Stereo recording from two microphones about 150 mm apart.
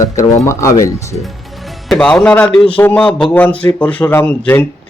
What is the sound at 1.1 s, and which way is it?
Speech, centre (ahead or behind).